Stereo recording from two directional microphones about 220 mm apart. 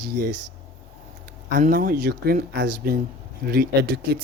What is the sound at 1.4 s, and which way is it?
Speech, 40° right (ahead or behind).